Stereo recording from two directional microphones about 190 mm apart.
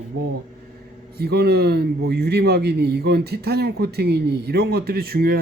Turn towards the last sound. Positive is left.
turn(degrees=-55)  # may be behind; listen again after turning